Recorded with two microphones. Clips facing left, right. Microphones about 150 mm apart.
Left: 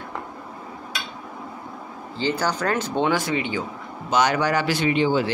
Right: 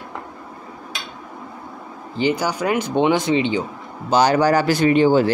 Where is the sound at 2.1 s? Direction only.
15° right (ahead or behind).